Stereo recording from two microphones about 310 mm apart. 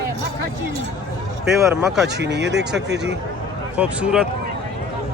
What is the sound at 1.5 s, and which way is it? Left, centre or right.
Speech, centre.